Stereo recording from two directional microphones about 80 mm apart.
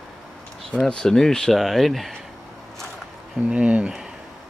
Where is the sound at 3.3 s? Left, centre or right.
Centre.